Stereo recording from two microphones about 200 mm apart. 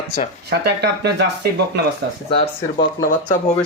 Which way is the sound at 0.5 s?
55° right (ahead or behind).